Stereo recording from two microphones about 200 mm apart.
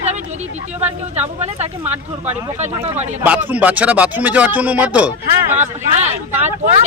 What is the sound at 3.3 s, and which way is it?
Speech, 5° right (ahead or behind).